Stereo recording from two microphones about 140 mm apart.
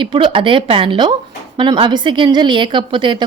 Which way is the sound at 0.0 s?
35° right (ahead or behind).